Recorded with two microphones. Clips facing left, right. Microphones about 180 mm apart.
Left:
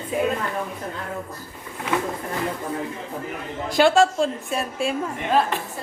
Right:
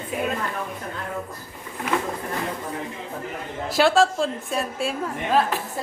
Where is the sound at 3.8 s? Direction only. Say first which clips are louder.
Left 2 dB; centre (ahead or behind).